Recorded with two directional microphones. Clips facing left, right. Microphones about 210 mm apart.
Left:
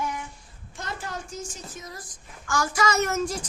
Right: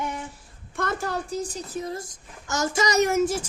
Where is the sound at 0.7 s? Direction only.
55° right (ahead or behind).